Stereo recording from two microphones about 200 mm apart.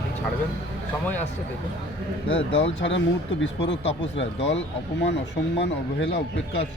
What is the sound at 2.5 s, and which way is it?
Speech, 65° left (ahead or behind).